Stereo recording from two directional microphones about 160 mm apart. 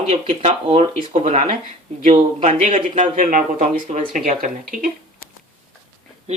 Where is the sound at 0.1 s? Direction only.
40° right (ahead or behind); by 4.9 s 60° right (ahead or behind).